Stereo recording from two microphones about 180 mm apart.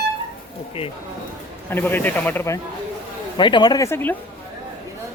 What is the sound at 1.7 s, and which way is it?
Speech, 10° left (ahead or behind).